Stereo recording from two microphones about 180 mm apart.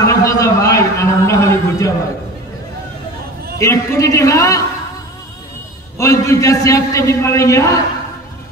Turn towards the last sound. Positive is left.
turn(degrees=15)  # may be behind; listen again after turning